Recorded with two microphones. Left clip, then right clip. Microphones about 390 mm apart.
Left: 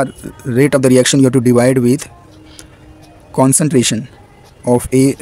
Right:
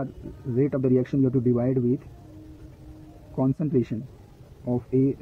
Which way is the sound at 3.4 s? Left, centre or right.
Centre.